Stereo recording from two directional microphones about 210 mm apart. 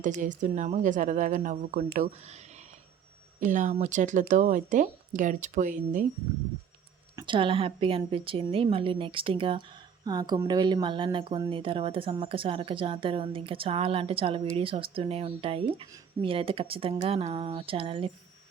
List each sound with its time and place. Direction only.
0.0 s speech: 35° right (ahead or behind)
3.4 s speech: 35° right (ahead or behind)
7.2 s a woman's voice: 25° right (ahead or behind)